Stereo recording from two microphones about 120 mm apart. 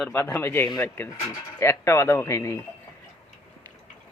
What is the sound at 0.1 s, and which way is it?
Speech, 20° left (ahead or behind).